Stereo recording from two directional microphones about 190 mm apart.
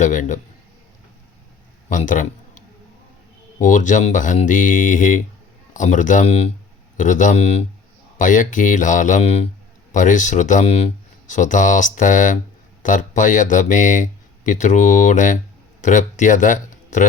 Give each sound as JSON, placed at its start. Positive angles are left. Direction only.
{"t": 0.0, "sound": "speech", "side_deg": 40}
{"t": 1.9, "sound": "a sound", "side_deg": 45}
{"t": 3.6, "sound": "speech", "side_deg": 40}